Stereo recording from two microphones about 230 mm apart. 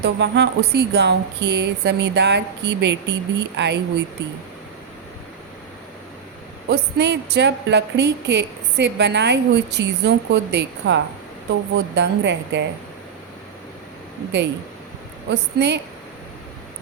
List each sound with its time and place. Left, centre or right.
0.0 s a woman's voice: right
6.7 s a woman's voice: right
15.3 s a woman's voice: right